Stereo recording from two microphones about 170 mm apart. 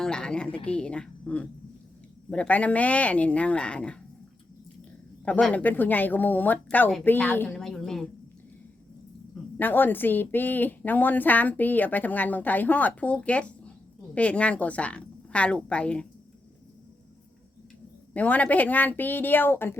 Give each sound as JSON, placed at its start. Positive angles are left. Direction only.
{"t": 0.0, "sound": "a woman's voice", "side_deg": 5}
{"t": 5.2, "sound": "a woman's voice", "side_deg": 5}
{"t": 9.3, "sound": "a woman's voice", "side_deg": 10}
{"t": 18.1, "sound": "a woman's voice", "side_deg": 10}